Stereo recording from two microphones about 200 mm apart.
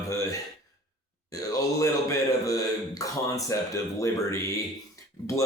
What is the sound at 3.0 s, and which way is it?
Speech, 15° left (ahead or behind).